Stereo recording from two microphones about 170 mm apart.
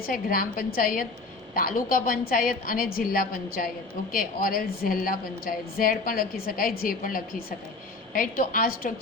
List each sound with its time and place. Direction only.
0.0 s a woman's voice: 55° left (ahead or behind)